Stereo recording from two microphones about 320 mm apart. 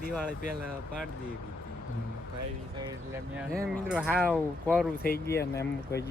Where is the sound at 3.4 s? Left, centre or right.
Centre.